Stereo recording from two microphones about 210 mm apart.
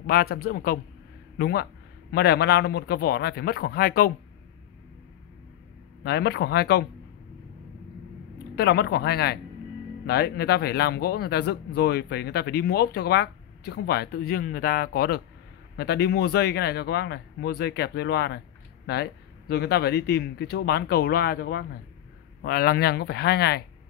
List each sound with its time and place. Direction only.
0.0 s a man's voice: 45° left (ahead or behind)
6.0 s a man's voice: 50° left (ahead or behind)
8.5 s a man's voice: 50° left (ahead or behind)